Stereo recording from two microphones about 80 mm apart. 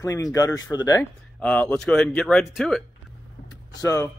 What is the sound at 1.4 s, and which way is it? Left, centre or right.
Speech, centre.